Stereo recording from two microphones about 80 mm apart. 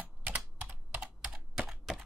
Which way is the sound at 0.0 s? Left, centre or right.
Right.